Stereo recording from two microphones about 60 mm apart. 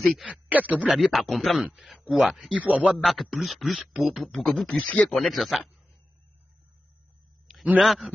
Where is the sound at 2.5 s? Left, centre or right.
Right.